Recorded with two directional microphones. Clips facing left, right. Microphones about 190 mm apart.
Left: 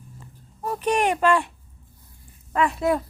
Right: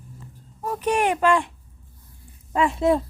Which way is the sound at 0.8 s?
10° right (ahead or behind).